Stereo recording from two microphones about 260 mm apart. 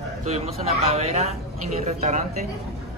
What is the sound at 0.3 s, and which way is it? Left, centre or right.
Speech, right.